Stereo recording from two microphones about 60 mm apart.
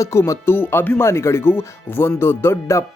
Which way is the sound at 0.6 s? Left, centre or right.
Left.